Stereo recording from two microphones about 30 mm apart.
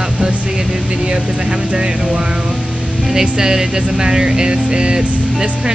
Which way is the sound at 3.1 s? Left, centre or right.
Centre.